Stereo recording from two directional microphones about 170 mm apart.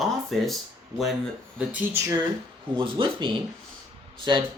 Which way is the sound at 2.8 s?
30° right (ahead or behind).